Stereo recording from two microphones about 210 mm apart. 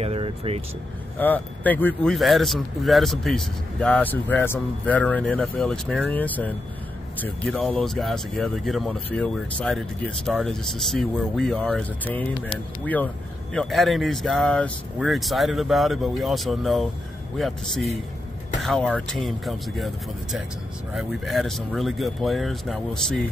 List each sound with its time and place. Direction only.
0.0 s vehicle: 30° right (ahead or behind)
1.2 s speech: 10° left (ahead or behind)
20.9 s speech: centre (ahead or behind)